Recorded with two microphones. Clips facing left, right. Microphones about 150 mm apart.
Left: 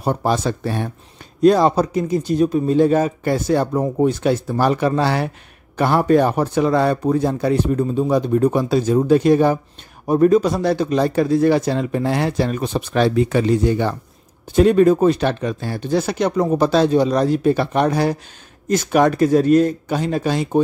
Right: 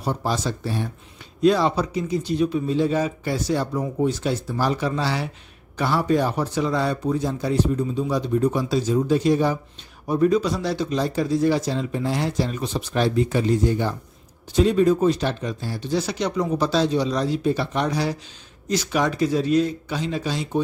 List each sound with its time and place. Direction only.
0.0 s a man's voice: 55° left (ahead or behind)
1.4 s a man's voice: 45° left (ahead or behind); by 13.9 s 70° left (ahead or behind)
14.5 s a man's voice: 55° left (ahead or behind)